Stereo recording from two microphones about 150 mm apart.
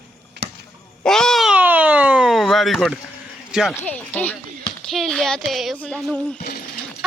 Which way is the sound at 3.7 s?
10° left (ahead or behind).